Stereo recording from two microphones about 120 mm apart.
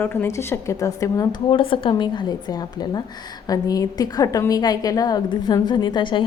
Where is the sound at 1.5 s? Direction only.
45° left (ahead or behind).